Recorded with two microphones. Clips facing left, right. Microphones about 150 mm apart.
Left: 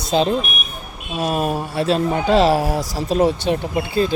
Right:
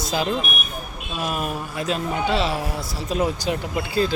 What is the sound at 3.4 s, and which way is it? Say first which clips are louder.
Speech: left 5 dB; 20° left (ahead or behind).